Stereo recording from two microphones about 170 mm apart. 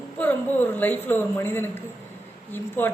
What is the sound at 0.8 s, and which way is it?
Speech, 10° left (ahead or behind).